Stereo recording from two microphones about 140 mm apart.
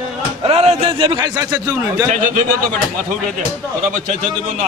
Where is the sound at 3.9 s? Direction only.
60° right (ahead or behind).